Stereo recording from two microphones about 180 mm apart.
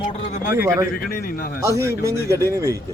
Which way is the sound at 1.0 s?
60° left (ahead or behind).